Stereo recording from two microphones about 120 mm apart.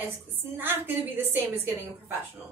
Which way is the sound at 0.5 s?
15° right (ahead or behind).